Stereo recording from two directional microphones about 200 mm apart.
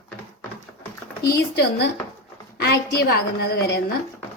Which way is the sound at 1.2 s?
55° left (ahead or behind).